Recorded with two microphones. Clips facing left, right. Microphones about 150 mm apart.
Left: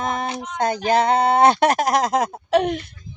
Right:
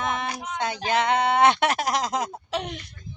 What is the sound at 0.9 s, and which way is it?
Speech, 35° left (ahead or behind).